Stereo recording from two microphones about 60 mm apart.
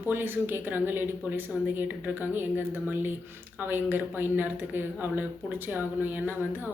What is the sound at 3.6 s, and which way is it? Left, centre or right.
Speech, right.